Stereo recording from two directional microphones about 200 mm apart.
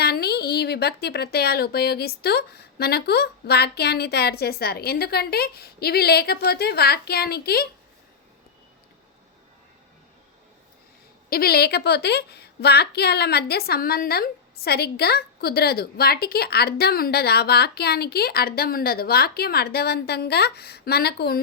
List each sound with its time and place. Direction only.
0.0 s a woman's voice: 50° left (ahead or behind)
11.3 s a woman's voice: 50° left (ahead or behind)